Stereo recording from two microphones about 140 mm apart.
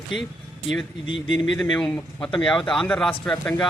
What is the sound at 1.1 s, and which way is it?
Speech, 35° left (ahead or behind).